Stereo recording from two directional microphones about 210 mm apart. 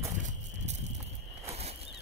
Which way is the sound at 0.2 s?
35° right (ahead or behind).